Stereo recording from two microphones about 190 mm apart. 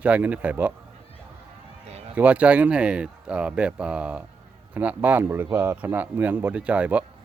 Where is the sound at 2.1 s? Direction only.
5° right (ahead or behind).